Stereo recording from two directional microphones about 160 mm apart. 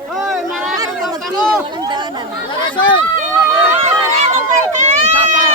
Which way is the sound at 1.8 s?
30° right (ahead or behind).